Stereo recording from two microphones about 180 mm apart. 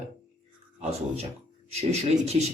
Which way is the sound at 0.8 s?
35° right (ahead or behind).